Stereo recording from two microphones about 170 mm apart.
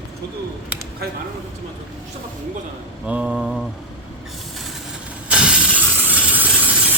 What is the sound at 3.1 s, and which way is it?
Mantra, 5° right (ahead or behind).